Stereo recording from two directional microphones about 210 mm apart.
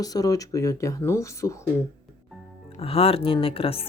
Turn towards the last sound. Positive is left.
turn(degrees=25)  # may be behind; listen again after turning